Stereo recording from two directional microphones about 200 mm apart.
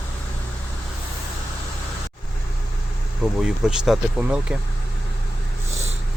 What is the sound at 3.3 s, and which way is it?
Speech, centre (ahead or behind).